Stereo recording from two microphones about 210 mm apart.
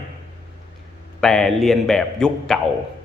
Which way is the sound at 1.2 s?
Centre (ahead or behind).